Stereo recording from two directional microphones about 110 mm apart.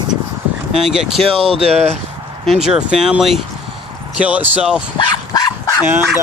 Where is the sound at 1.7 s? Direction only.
80° right.